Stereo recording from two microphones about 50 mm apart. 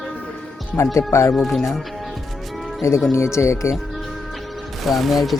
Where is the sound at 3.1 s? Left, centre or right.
Left.